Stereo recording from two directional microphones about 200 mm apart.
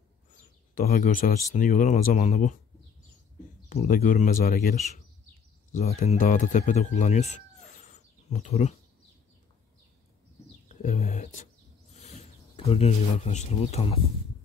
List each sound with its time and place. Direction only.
0.3 s a sound: 45° left (ahead or behind)
1.5 s speech: 40° left (ahead or behind)
3.6 s speech: 45° left (ahead or behind)
5.7 s speech: 35° left (ahead or behind)
7.9 s bird: 35° left (ahead or behind)
10.8 s a sound: 35° left (ahead or behind)
11.9 s speech: 35° left (ahead or behind)